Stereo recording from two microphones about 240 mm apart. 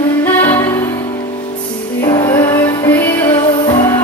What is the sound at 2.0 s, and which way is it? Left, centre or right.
Music, centre.